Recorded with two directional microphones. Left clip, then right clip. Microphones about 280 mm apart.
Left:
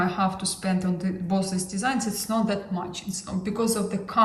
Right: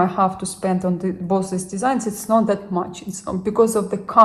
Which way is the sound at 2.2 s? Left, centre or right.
Centre.